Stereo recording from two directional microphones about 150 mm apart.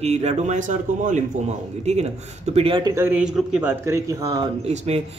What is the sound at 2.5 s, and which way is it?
Speech, 35° right (ahead or behind).